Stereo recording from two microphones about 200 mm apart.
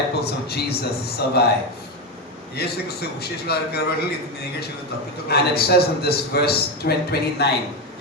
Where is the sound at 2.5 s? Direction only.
50° left (ahead or behind).